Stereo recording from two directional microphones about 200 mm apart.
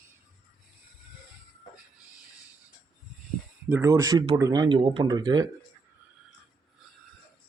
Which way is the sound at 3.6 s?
10° right (ahead or behind).